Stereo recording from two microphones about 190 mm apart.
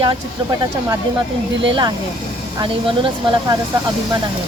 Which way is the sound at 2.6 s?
25° right (ahead or behind).